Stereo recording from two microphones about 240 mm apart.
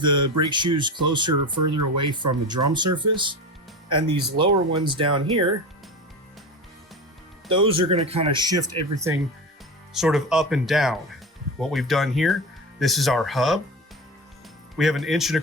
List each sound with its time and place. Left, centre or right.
0.0 s speech: centre
7.4 s speech: right
9.9 s speech: centre
14.8 s speech: centre